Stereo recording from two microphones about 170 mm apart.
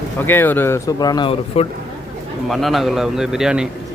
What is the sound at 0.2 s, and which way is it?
Speech, 10° left (ahead or behind).